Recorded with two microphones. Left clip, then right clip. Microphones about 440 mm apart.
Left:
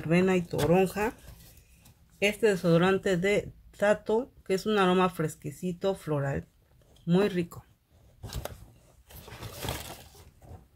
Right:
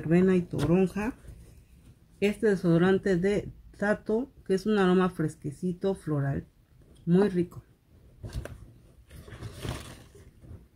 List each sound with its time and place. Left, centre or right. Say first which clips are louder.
0.1 s speech: right 1 dB; centre
2.1 s speech: left 1 dB; centre